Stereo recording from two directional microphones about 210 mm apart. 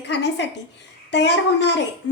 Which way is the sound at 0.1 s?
55° left (ahead or behind).